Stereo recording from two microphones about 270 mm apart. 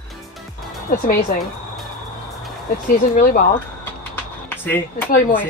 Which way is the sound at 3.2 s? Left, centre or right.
Left.